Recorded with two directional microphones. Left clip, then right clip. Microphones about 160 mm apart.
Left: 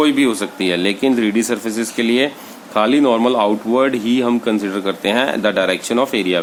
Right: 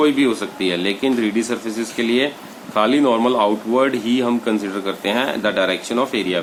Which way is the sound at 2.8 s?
45° left (ahead or behind).